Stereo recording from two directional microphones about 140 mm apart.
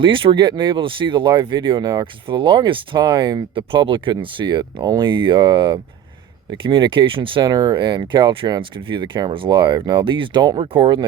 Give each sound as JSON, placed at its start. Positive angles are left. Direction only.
{"t": 0.0, "sound": "speech", "side_deg": -35}